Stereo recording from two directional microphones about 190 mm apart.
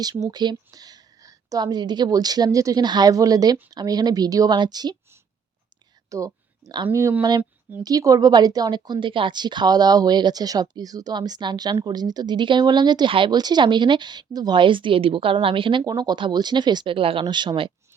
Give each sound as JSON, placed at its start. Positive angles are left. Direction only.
{"t": 0.0, "sound": "speech", "side_deg": -20}
{"t": 6.1, "sound": "a sound", "side_deg": -15}
{"t": 6.8, "sound": "speech", "side_deg": -10}